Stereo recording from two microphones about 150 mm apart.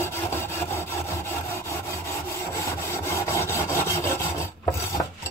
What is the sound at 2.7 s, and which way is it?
Rub, 20° left (ahead or behind).